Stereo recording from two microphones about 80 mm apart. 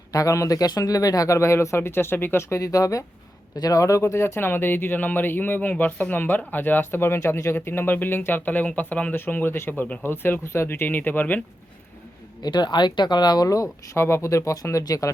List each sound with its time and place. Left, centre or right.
0.1 s speech: left
12.4 s speech: left